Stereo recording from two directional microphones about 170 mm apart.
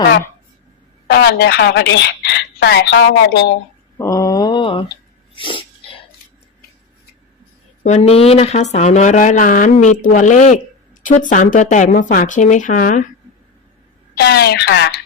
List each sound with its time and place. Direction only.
1.0 s a woman's voice: 85° left
3.9 s mantra: 20° left (ahead or behind)
5.3 s sneeze: 30° left (ahead or behind)
7.9 s a woman's voice: 40° left (ahead or behind)
14.2 s speech: 75° left (ahead or behind)